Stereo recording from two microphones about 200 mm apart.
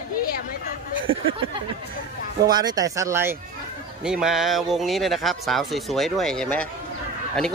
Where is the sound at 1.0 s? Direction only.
75° right (ahead or behind).